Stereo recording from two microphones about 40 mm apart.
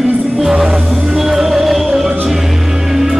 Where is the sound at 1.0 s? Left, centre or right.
Centre.